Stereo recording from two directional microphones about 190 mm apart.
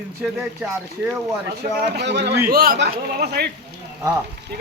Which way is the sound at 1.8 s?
65° right (ahead or behind).